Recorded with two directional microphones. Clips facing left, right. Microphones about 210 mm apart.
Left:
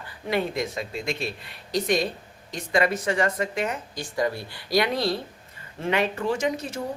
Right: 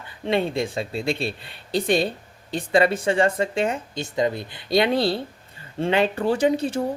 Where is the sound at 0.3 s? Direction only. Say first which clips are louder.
Right 3 dB; 25° right (ahead or behind).